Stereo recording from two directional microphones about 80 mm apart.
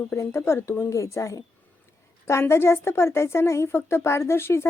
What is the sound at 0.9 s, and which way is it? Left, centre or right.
A woman's voice, left.